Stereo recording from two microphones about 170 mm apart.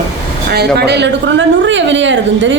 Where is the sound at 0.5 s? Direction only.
75° right (ahead or behind).